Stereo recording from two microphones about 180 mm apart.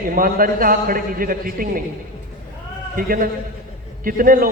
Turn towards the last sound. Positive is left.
turn(degrees=-50)  # may be behind; listen again after turning